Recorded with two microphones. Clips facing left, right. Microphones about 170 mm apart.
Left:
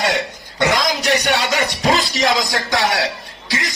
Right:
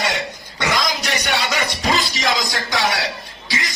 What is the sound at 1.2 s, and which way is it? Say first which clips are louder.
Music: left 3 dB; 75° left (ahead or behind).